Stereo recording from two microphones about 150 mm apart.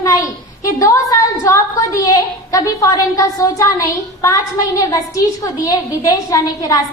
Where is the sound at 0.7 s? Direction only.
20° left (ahead or behind).